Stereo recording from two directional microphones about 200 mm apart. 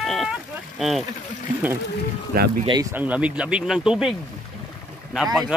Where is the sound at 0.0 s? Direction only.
Centre (ahead or behind).